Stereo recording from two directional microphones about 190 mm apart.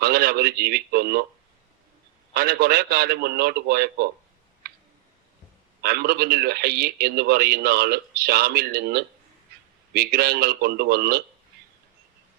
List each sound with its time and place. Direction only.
0.0 s a man's voice: 55° right (ahead or behind)
2.3 s a man's voice: 55° right (ahead or behind)
5.8 s a man's voice: 55° right (ahead or behind)